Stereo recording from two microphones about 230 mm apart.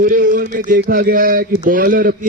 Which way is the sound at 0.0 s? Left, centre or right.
Right.